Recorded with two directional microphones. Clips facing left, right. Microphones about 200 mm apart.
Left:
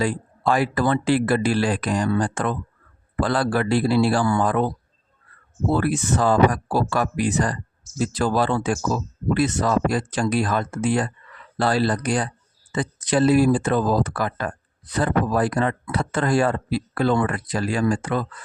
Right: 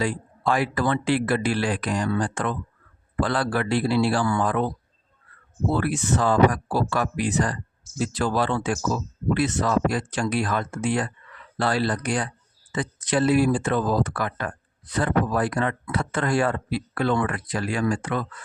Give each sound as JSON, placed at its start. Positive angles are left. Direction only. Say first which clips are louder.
{"t": 0.0, "sound": "speech", "louder": "left 3 dB", "side_deg": 40}
{"t": 5.7, "sound": "speech", "louder": "left 3 dB", "side_deg": 40}